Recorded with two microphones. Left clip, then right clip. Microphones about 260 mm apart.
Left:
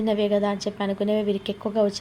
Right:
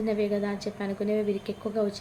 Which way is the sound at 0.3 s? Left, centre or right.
Left.